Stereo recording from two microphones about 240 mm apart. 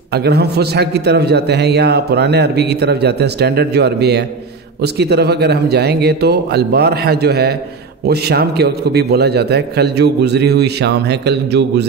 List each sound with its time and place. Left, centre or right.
0.1 s a man's voice: right